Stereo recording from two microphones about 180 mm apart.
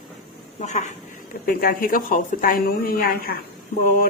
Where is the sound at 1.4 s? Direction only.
55° left (ahead or behind).